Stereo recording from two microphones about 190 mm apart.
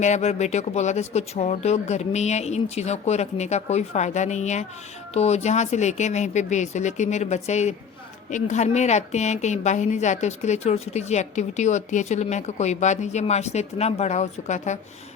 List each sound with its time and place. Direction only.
0.0 s a woman's voice: 35° left (ahead or behind)